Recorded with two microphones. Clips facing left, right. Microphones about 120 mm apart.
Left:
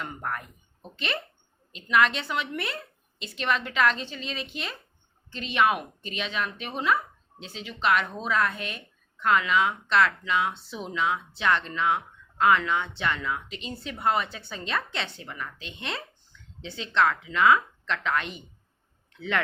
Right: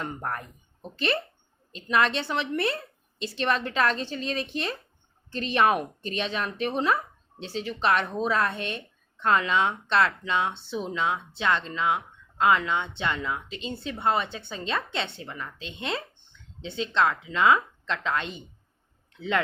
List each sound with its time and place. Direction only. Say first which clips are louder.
0.0 s a woman's voice: right 1 dB; 35° right (ahead or behind)